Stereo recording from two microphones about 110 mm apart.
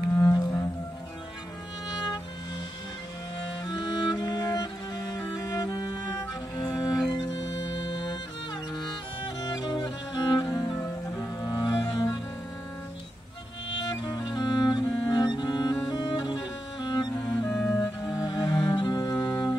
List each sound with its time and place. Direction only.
0.1 s music: 35° left (ahead or behind)
3.3 s music: 50° left (ahead or behind)
9.4 s music: 40° left (ahead or behind)
10.8 s cello: 35° left (ahead or behind)
11.9 s music: 35° left (ahead or behind)
13.7 s cello: 40° left (ahead or behind)
15.9 s music: 40° left (ahead or behind)